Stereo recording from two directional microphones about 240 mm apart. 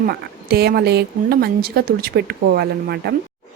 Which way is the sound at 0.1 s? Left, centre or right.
Right.